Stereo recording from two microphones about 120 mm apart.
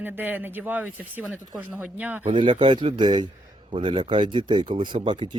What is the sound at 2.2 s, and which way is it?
Speech, 45° right (ahead or behind).